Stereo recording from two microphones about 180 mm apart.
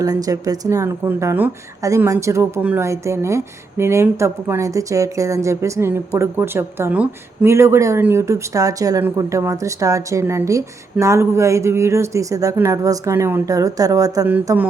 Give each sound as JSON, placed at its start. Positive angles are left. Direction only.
{"t": 0.0, "sound": "speech", "side_deg": -20}